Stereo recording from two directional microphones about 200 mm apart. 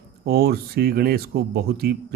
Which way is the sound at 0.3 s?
50° right (ahead or behind).